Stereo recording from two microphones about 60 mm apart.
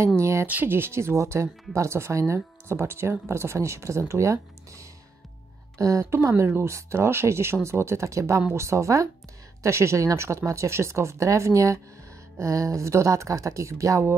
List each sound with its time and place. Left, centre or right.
0.2 s a sound: right
0.7 s speech: right
6.3 s speech: right
9.6 s speech: right